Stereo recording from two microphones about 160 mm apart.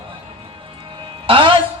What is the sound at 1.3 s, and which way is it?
Speech, 35° right (ahead or behind).